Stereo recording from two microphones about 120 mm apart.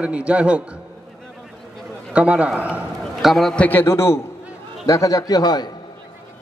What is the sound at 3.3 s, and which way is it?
A man's voice, 5° left (ahead or behind).